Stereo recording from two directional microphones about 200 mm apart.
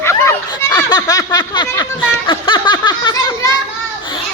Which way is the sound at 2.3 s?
25° left (ahead or behind).